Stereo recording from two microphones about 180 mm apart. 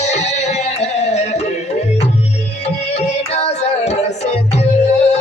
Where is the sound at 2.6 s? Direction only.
35° left (ahead or behind).